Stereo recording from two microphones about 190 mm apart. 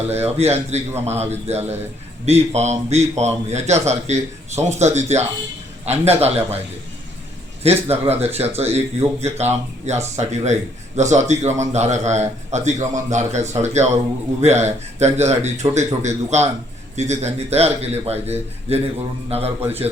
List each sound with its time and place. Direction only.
0.1 s speech: 35° right (ahead or behind)
7.6 s speech: 35° right (ahead or behind)